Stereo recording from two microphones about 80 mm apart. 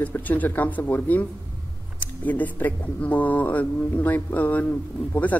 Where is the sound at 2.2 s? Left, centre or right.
Left.